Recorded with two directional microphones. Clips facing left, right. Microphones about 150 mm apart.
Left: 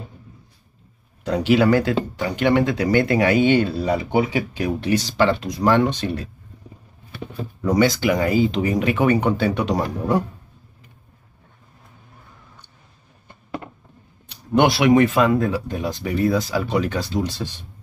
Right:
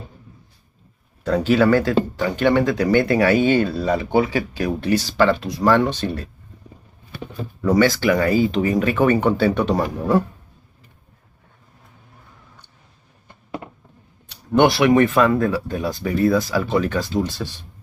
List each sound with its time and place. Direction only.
1.2 s speech: 15° left (ahead or behind)
7.6 s speech: 20° left (ahead or behind)
14.5 s speech: 15° left (ahead or behind)